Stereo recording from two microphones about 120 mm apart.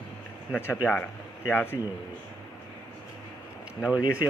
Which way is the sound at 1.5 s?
20° left (ahead or behind).